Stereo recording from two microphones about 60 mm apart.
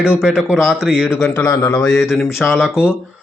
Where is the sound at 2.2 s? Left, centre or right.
Centre.